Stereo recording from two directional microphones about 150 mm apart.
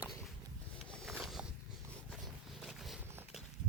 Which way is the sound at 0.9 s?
5° left (ahead or behind).